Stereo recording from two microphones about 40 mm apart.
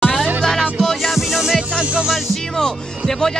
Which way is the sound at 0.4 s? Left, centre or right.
Centre.